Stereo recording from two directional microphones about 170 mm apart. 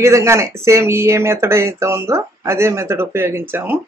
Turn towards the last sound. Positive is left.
turn(degrees=-10)  # may be behind; listen again after turning